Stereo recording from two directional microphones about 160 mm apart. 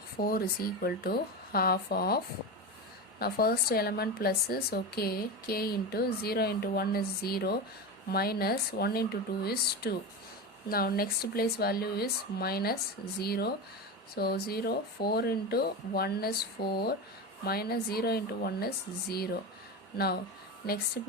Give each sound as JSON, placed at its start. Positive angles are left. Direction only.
{"t": 0.2, "sound": "speech", "side_deg": 70}